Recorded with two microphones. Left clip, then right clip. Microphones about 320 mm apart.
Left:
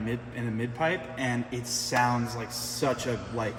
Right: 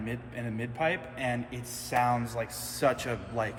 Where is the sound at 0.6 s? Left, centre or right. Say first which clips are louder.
Left 1 dB; centre.